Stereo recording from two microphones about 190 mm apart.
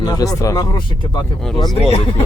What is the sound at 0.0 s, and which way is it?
Speech, 20° left (ahead or behind).